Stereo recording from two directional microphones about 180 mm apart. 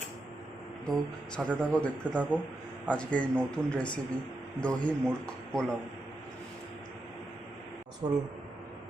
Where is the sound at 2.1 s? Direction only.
10° right (ahead or behind).